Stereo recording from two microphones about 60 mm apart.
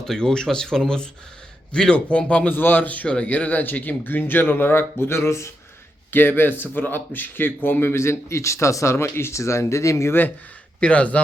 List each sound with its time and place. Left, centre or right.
0.0 s a man's voice: centre; by 5.5 s left
6.1 s speech: left
10.8 s speech: left